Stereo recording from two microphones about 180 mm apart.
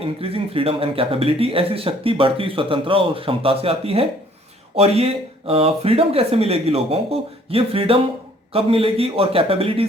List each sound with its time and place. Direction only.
0.0 s speech: 30° right (ahead or behind)
5.5 s speech: 30° right (ahead or behind)